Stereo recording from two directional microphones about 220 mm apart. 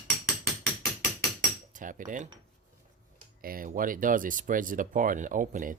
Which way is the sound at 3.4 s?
40° right (ahead or behind).